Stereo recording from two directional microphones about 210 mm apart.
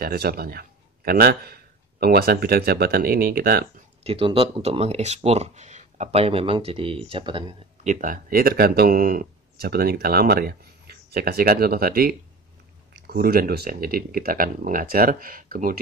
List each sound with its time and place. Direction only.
0.0 s speech: 45° right (ahead or behind)
4.0 s speech: 25° right (ahead or behind)
7.8 s speech: 40° right (ahead or behind)